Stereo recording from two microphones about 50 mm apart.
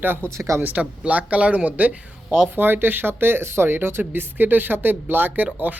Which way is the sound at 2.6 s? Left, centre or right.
Right.